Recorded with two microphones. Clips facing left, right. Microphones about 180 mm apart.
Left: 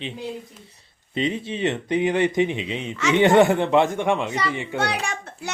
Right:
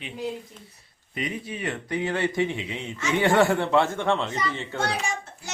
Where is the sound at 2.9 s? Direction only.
90° left.